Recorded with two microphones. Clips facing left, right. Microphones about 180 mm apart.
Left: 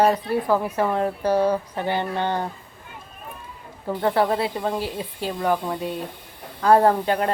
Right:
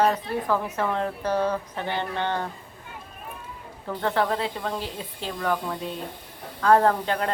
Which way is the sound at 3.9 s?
10° left (ahead or behind).